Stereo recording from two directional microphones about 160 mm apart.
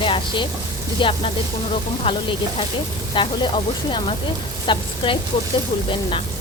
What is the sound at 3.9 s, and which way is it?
Frying, 30° left (ahead or behind).